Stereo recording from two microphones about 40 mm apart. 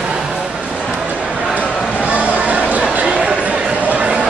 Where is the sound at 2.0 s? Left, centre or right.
Right.